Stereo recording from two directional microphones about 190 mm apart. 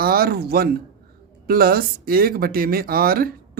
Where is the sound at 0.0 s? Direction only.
55° right (ahead or behind).